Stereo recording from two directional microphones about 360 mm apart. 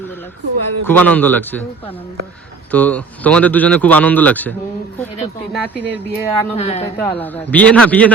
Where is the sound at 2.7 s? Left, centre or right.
Centre.